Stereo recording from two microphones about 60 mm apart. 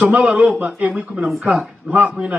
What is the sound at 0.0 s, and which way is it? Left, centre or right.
Speech, centre.